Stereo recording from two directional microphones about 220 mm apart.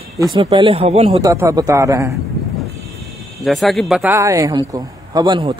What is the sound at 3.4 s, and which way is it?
A man's voice, centre (ahead or behind).